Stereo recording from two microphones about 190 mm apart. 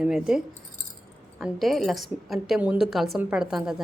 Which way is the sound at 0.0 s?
5° right (ahead or behind).